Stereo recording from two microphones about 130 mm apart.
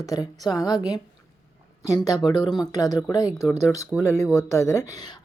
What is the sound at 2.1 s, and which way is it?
A woman's voice, 35° left (ahead or behind).